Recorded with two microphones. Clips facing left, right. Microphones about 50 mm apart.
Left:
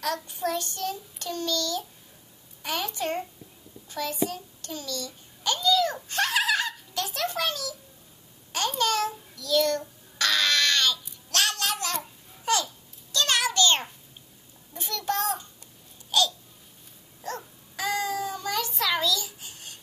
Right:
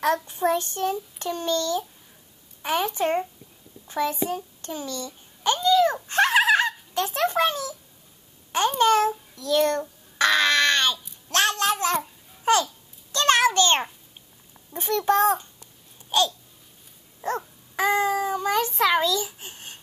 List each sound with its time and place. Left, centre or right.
0.0 s a child's voice: right
3.8 s a sound: right
9.3 s child singing: right
11.2 s music: right
12.5 s babbling: right
13.1 s a sound: right
16.1 s babbling: right
17.2 s a sound: right
17.7 s child singing: right